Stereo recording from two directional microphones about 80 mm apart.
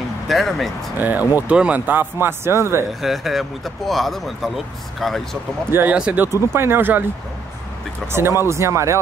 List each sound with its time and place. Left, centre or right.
0.3 s speech: centre
0.9 s speech: right
2.9 s speech: centre
5.7 s speech: right
8.1 s speech: right